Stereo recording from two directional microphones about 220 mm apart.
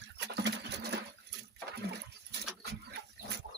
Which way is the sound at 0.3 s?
50° right (ahead or behind).